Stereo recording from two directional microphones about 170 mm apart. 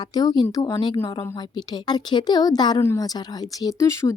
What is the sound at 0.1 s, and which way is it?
Speech, 25° left (ahead or behind).